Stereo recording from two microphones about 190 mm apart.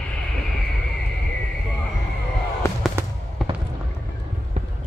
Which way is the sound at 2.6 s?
15° left (ahead or behind).